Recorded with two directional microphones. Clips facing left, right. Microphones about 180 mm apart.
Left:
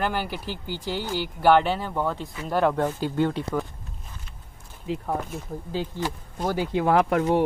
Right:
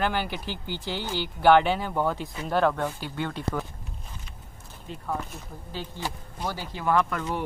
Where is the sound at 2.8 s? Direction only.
40° left (ahead or behind).